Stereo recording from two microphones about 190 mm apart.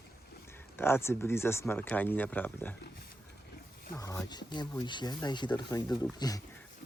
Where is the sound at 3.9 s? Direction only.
15° left (ahead or behind).